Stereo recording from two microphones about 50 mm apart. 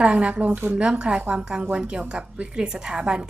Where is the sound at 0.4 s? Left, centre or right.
Right.